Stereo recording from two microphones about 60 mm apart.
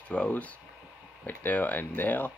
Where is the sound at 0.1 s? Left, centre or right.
Centre.